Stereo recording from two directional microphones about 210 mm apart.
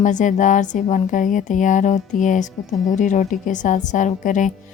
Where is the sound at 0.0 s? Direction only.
35° left (ahead or behind).